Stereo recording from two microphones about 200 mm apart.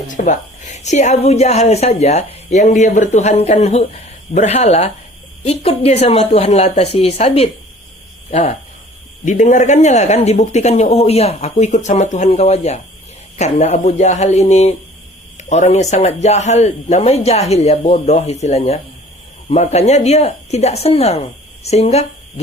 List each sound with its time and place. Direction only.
0.1 s a woman's voice: 40° left (ahead or behind)